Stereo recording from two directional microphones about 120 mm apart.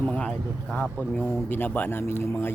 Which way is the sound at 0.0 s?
10° left (ahead or behind).